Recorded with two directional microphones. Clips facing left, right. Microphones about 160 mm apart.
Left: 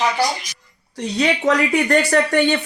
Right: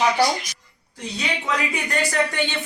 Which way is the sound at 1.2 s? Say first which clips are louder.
Left 9 dB; 65° left (ahead or behind).